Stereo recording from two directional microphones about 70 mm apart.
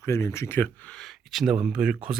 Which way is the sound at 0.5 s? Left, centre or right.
Left.